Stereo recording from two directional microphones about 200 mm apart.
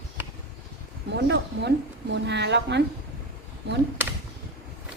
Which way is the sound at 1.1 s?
60° right (ahead or behind).